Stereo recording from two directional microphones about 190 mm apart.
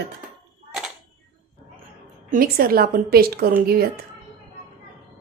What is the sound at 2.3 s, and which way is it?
A woman's voice, 50° right (ahead or behind).